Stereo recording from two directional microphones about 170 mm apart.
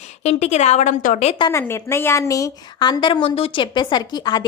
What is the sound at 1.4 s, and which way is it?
A woman's voice, 15° left (ahead or behind).